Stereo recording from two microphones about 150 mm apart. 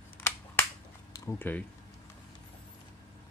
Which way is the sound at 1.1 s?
15° left (ahead or behind).